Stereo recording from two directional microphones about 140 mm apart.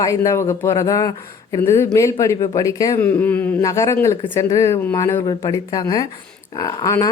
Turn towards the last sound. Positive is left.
turn(degrees=25)  # may be behind; listen again after turning